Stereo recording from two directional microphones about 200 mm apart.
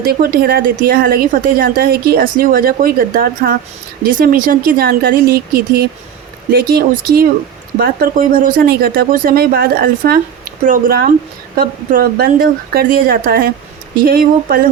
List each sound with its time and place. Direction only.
0.0 s a woman's voice: 45° right (ahead or behind)